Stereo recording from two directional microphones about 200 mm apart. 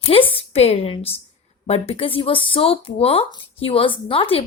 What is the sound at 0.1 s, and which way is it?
Speech, 25° left (ahead or behind).